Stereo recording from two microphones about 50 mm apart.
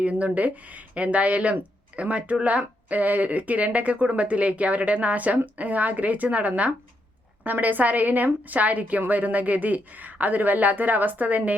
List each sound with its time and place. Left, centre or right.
0.0 s a woman's voice: right